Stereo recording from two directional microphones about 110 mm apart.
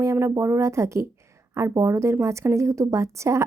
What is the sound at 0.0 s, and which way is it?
A woman's voice, 25° right (ahead or behind).